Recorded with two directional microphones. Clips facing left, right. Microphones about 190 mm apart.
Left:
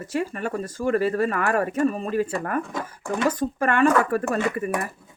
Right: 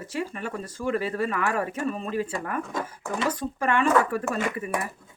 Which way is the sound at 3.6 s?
50° left (ahead or behind).